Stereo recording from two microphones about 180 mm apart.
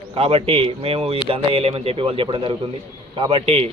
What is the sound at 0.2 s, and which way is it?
Speech, 35° right (ahead or behind).